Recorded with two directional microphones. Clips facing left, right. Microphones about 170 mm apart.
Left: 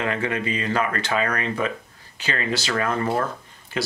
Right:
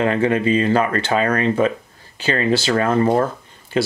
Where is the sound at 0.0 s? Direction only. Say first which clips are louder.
Right 8 dB; 35° right (ahead or behind).